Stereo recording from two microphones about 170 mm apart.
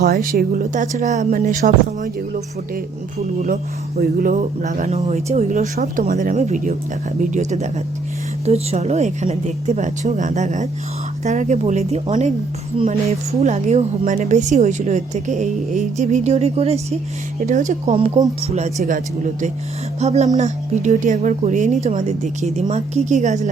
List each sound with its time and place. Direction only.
0.0 s a woman's voice: 60° right (ahead or behind)